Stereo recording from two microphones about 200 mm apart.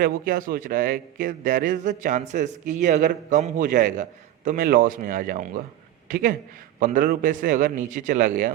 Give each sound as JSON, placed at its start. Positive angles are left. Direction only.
{"t": 0.0, "sound": "a man's voice", "side_deg": -45}